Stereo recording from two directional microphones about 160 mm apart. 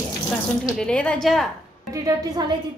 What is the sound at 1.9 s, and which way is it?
Speech, 25° right (ahead or behind).